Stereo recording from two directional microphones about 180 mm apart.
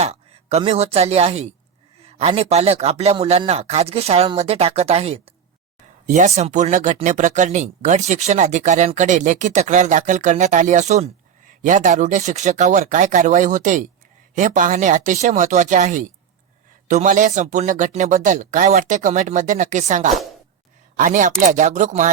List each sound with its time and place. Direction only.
0.0 s speech: 35° right (ahead or behind)